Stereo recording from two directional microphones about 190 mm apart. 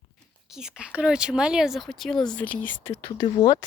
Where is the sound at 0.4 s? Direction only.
Centre (ahead or behind).